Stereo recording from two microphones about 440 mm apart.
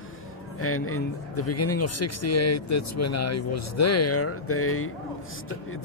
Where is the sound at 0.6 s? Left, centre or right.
Left.